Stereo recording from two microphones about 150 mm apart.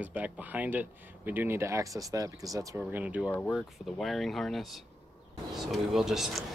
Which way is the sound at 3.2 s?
10° left (ahead or behind).